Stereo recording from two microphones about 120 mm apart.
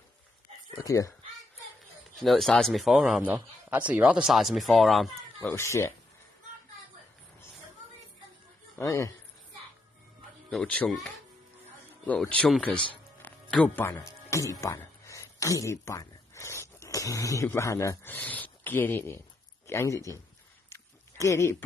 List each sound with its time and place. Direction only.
0.8 s speech: 25° left (ahead or behind)
2.1 s speech: centre (ahead or behind)
3.3 s speech: 15° right (ahead or behind)
5.5 s speech: 20° left (ahead or behind)
8.7 s speech: 25° left (ahead or behind)
10.5 s speech: 10° left (ahead or behind)
12.1 s speech: 10° left (ahead or behind)
13.2 s music: 10° left (ahead or behind)
13.9 s speech: 25° left (ahead or behind)
20.7 s a sound: 25° left (ahead or behind)